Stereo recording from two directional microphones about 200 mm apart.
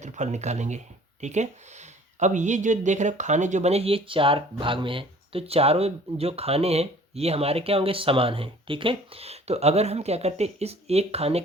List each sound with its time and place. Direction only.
0.0 s speech: 35° right (ahead or behind)